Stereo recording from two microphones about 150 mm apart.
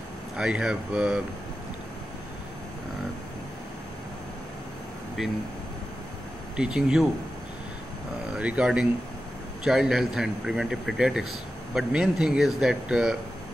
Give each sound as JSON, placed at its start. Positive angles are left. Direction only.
{"t": 0.4, "sound": "a man's voice", "side_deg": -5}
{"t": 6.5, "sound": "a man's voice", "side_deg": -5}
{"t": 8.3, "sound": "a man's voice", "side_deg": -5}